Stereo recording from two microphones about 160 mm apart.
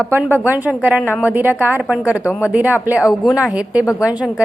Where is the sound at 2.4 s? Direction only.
10° right (ahead or behind).